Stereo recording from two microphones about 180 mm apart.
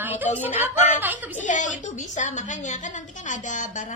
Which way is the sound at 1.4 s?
45° left (ahead or behind).